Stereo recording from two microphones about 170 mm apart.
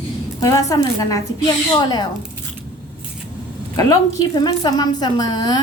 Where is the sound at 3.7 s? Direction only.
20° left (ahead or behind).